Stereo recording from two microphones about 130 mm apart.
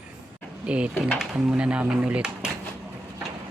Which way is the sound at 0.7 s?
5° right (ahead or behind).